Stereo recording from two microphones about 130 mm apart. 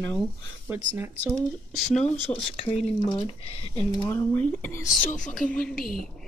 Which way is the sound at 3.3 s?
50° left (ahead or behind).